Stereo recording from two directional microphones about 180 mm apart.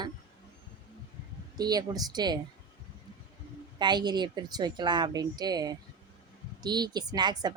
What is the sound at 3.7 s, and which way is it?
Speech, 25° right (ahead or behind).